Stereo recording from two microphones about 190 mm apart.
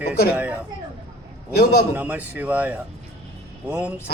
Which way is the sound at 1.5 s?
55° left (ahead or behind).